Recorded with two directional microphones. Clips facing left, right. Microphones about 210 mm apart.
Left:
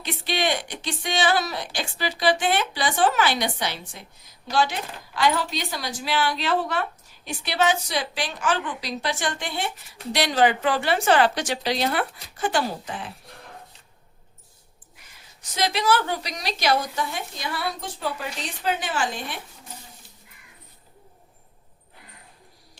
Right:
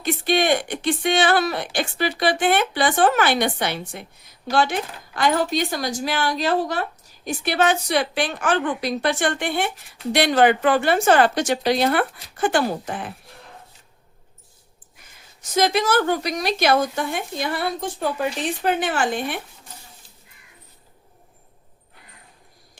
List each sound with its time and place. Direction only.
0.0 s speech: 50° right (ahead or behind)
7.3 s a woman's voice: 50° right (ahead or behind)
15.5 s a woman's voice: 45° right (ahead or behind)